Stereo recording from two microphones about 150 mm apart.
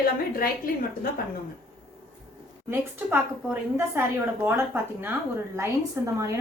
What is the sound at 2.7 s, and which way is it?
Speech, 15° right (ahead or behind).